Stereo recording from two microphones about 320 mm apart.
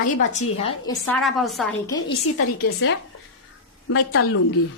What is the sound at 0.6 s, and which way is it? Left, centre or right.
Speech, centre.